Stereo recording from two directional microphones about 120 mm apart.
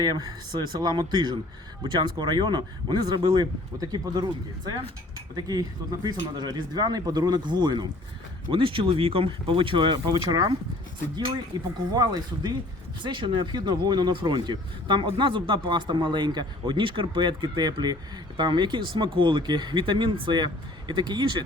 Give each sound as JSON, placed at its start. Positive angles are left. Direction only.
{"t": 0.6, "sound": "speech", "side_deg": -35}